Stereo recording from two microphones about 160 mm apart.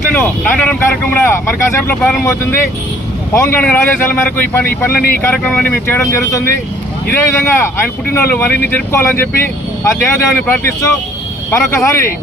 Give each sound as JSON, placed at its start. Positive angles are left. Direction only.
{"t": 0.1, "sound": "speech", "side_deg": 10}